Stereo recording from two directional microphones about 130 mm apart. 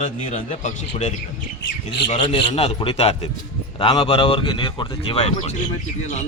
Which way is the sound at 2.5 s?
50° left (ahead or behind).